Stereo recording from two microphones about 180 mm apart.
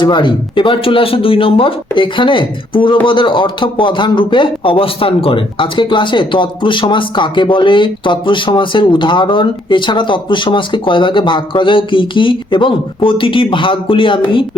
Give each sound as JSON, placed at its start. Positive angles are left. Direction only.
{"t": 0.0, "sound": "speech", "side_deg": 25}